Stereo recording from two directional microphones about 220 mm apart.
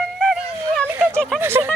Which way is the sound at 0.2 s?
Centre (ahead or behind).